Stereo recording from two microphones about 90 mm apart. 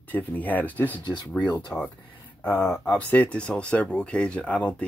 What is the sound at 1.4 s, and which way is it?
Speech, 55° left (ahead or behind).